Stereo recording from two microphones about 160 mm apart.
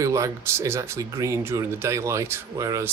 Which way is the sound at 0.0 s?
20° right (ahead or behind).